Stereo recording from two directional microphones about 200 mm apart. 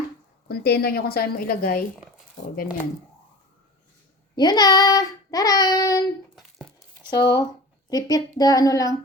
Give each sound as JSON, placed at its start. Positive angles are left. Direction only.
{"t": 0.4, "sound": "a woman's voice", "side_deg": 50}
{"t": 4.4, "sound": "child singing", "side_deg": 20}
{"t": 6.3, "sound": "crumpling", "side_deg": 0}
{"t": 7.1, "sound": "child singing", "side_deg": 20}